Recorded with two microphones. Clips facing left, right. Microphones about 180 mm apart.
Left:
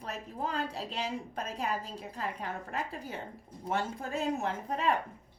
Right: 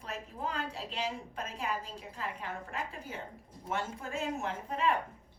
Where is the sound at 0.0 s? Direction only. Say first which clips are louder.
Left 2 dB; 40° left (ahead or behind).